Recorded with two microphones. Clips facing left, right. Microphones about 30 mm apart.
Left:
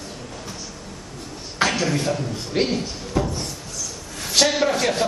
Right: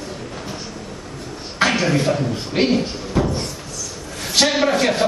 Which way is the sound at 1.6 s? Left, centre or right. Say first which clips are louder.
Right 4 dB; centre.